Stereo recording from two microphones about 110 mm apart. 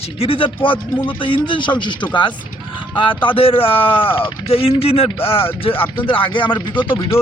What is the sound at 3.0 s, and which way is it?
Speech, 50° left (ahead or behind).